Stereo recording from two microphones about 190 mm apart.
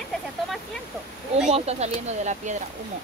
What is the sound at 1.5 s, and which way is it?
Speech, 35° right (ahead or behind).